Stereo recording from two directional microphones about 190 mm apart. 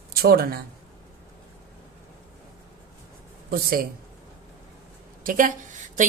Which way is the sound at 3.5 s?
50° right (ahead or behind).